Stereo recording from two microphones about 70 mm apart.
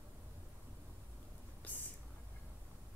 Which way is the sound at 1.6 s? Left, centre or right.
Left.